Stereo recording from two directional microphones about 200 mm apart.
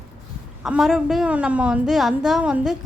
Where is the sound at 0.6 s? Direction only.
Centre (ahead or behind).